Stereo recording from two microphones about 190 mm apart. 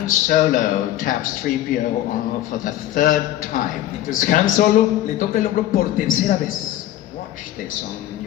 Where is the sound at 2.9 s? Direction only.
45° left (ahead or behind).